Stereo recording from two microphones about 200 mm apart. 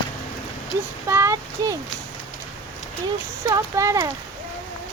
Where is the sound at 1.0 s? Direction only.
15° right (ahead or behind).